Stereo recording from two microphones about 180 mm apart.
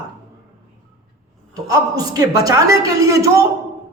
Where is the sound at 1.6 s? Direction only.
20° right (ahead or behind).